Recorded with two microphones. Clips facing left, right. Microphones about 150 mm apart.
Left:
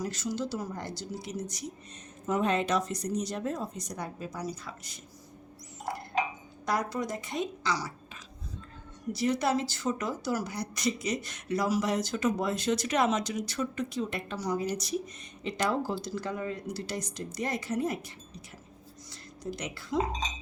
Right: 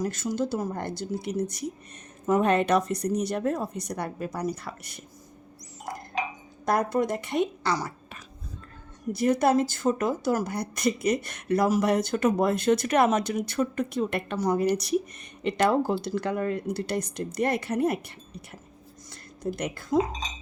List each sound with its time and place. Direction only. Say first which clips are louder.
0.0 s a woman's voice: right 5 dB; 50° right (ahead or behind)
6.7 s a woman's voice: right 6 dB; 55° right (ahead or behind)
19.4 s a woman's voice: right 6 dB; 55° right (ahead or behind)